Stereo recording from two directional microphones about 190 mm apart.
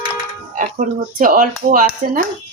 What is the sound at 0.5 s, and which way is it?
Speech, 45° right (ahead or behind).